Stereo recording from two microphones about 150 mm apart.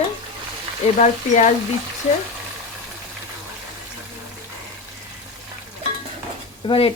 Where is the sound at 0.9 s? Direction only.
50° left (ahead or behind).